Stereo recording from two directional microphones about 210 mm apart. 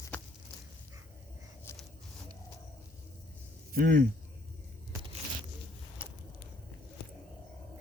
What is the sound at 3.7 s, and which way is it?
Speech, 50° right (ahead or behind).